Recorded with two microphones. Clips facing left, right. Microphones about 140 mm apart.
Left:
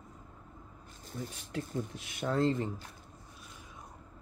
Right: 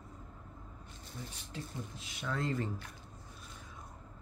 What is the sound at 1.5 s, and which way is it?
Speech, 65° left (ahead or behind).